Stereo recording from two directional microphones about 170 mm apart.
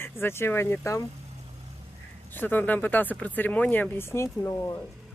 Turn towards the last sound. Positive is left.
turn(degrees=20)  # may be behind; listen again after turning